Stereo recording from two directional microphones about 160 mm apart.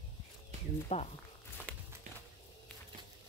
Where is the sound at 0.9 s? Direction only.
40° left (ahead or behind).